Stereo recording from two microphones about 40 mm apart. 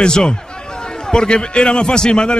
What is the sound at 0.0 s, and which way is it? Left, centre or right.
A man's voice, left.